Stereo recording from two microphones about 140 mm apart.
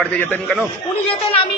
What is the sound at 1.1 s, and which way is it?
Speech, 40° left (ahead or behind).